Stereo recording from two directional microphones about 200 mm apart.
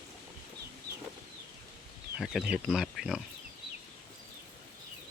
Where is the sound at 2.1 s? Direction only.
Centre (ahead or behind).